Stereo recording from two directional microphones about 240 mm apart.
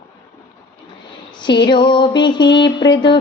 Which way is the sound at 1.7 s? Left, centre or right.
Centre.